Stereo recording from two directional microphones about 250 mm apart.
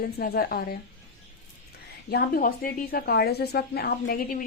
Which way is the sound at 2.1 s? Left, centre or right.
Left.